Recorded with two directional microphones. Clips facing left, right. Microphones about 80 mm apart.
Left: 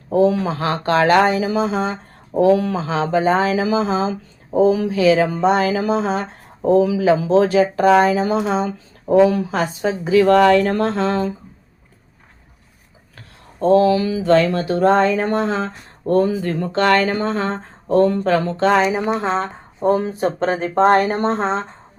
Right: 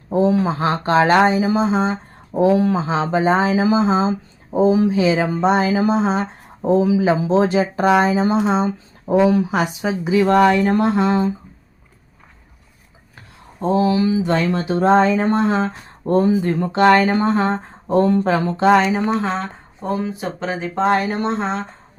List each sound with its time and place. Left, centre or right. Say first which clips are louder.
0.1 s a woman's voice: left 1 dB; right
13.6 s speech: left 3 dB; centre
18.8 s speech: even; centre
19.4 s speech: left 5 dB; left